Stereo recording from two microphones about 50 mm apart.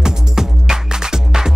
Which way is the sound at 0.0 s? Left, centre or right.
Centre.